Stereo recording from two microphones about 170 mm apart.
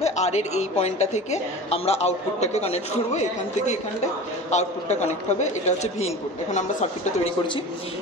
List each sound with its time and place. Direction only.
0.0 s a woman's voice: 40° left (ahead or behind)